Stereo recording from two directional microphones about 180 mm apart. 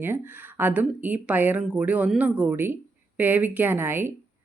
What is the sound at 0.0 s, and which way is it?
Speech, 10° right (ahead or behind).